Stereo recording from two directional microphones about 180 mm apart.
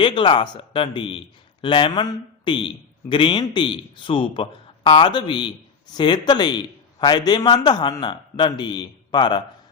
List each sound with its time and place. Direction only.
0.0 s a man's voice: 25° left (ahead or behind)